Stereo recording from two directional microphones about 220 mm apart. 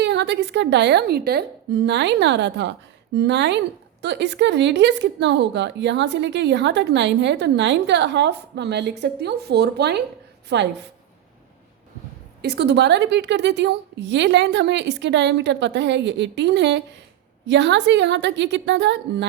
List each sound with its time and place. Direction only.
0.0 s a woman's voice: 50° right (ahead or behind)
12.4 s a woman's voice: 50° right (ahead or behind)